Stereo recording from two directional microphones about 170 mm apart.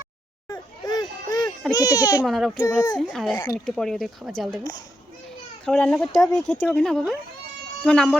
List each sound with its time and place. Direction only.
0.4 s a sound: 20° left (ahead or behind)
1.4 s a sound: 5° left (ahead or behind)
1.7 s a child's voice: 25° left (ahead or behind)
2.2 s speech: centre (ahead or behind)
2.6 s a child's voice: 20° left (ahead or behind)
2.9 s speech: 5° left (ahead or behind)
5.6 s speech: 5° left (ahead or behind)